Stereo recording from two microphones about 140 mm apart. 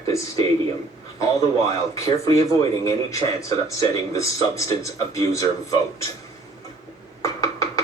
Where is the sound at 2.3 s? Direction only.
20° left (ahead or behind).